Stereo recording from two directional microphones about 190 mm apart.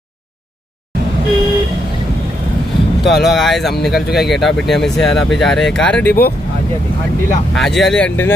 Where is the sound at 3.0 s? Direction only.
Centre (ahead or behind).